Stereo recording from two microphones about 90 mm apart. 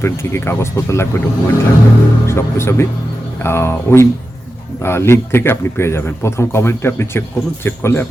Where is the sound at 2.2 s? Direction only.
30° left (ahead or behind).